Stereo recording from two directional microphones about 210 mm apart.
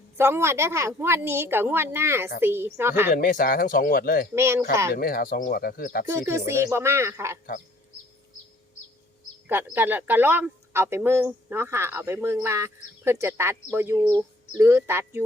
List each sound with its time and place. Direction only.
0.2 s speech: 10° right (ahead or behind)
3.1 s speech: 40° left (ahead or behind)
4.4 s speech: 10° right (ahead or behind)
4.9 s speech: 45° left (ahead or behind)
6.1 s speech: 15° right (ahead or behind)
9.5 s speech: 10° right (ahead or behind)